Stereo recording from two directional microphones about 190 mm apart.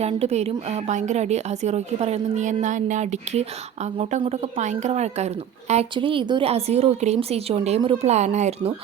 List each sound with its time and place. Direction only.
0.0 s a woman's voice: 35° right (ahead or behind)